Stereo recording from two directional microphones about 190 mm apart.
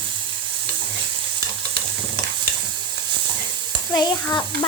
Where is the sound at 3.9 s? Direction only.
20° left (ahead or behind).